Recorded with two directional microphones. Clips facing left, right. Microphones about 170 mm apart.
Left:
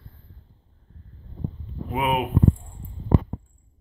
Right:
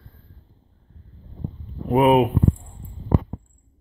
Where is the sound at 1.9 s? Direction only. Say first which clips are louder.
Right 9 dB; 40° right (ahead or behind).